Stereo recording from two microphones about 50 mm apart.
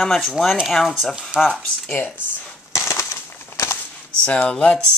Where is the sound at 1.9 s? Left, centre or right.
Left.